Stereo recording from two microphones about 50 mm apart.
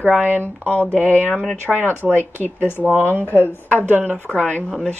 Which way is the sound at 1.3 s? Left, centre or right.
Centre.